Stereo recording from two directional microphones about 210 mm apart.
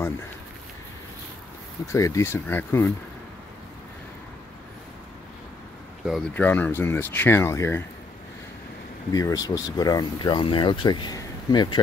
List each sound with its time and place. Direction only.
1.9 s speech: 15° left (ahead or behind)
6.0 s speech: 5° left (ahead or behind)
9.1 s speech: 15° left (ahead or behind)